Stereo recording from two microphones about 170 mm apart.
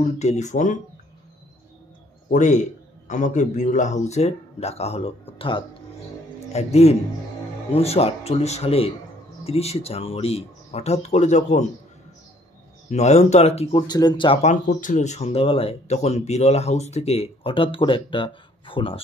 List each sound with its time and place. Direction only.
0.0 s speech: 40° left (ahead or behind)
2.2 s a man's voice: 45° left (ahead or behind)
12.9 s speech: 40° left (ahead or behind)